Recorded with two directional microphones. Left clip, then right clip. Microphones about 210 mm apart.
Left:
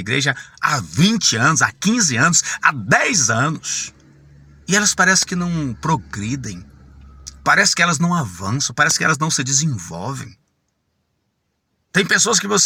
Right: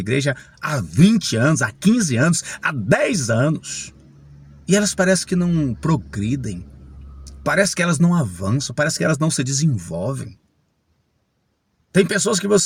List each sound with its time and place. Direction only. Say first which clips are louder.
0.1 s speech: left 3 dB; 5° right (ahead or behind)
11.9 s speech: left 2 dB; 5° right (ahead or behind)